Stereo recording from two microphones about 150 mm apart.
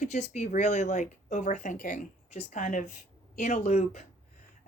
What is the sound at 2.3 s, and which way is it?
Speech, 50° left (ahead or behind).